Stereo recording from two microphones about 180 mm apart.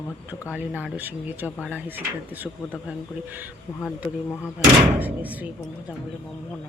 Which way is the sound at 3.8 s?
10° left (ahead or behind).